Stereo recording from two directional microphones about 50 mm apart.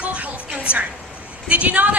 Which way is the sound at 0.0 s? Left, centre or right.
Right.